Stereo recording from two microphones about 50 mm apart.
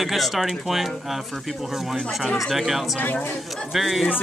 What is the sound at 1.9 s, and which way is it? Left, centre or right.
Speech, centre.